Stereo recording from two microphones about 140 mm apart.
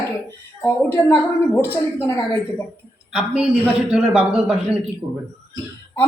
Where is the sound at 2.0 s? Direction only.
25° left (ahead or behind).